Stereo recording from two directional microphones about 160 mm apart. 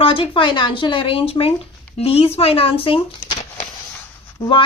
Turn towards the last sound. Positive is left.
turn(degrees=30)  # may be behind; listen again after turning